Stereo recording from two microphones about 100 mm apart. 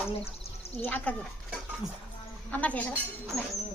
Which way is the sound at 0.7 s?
15° left (ahead or behind).